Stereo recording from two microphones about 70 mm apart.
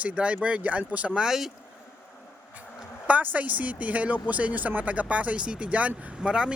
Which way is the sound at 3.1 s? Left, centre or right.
Right.